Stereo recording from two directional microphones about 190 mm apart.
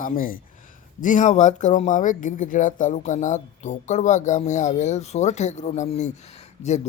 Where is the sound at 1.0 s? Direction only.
40° left (ahead or behind).